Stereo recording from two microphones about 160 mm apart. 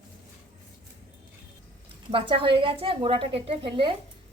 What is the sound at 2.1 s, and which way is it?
A woman's voice, 30° right (ahead or behind).